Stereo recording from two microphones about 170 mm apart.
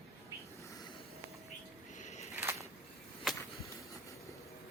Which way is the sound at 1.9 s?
45° left (ahead or behind).